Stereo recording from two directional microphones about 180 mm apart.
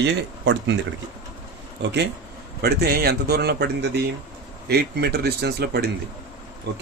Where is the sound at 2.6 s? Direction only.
60° right (ahead or behind).